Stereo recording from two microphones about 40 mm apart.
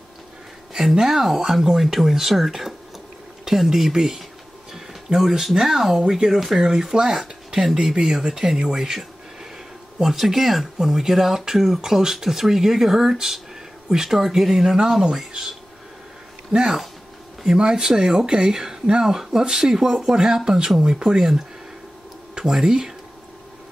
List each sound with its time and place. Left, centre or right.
0.7 s speech: centre
9.9 s speech: centre
17.6 s speech: centre
22.3 s speech: centre